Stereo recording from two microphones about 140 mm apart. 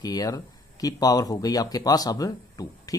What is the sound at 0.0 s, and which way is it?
Speech, 25° left (ahead or behind).